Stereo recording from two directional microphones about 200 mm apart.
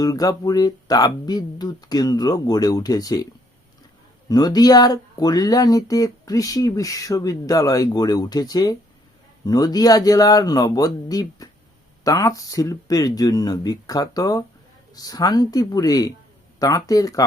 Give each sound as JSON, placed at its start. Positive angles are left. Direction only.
{"t": 0.0, "sound": "speech", "side_deg": 15}
{"t": 4.3, "sound": "speech", "side_deg": 20}